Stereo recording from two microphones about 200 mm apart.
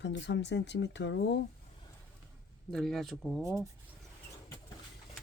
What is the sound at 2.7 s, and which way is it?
Speech, centre (ahead or behind).